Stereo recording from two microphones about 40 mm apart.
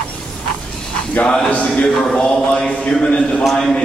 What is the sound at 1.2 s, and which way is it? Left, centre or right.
Speech, left.